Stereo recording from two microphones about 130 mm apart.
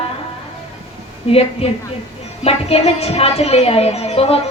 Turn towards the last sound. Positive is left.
turn(degrees=50)  # may be behind; listen again after turning